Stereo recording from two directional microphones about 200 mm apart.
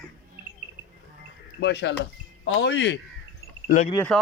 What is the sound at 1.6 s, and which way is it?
Speech, 60° left (ahead or behind).